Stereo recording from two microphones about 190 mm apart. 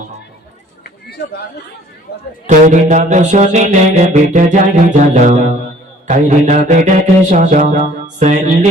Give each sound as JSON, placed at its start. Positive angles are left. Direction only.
{"t": 2.5, "sound": "music", "side_deg": -40}